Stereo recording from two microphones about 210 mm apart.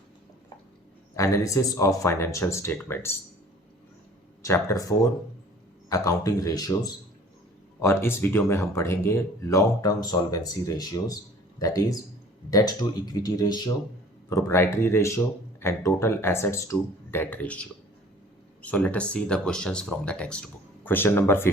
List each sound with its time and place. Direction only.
1.1 s speech: 15° left (ahead or behind)
4.4 s speech: 15° left (ahead or behind)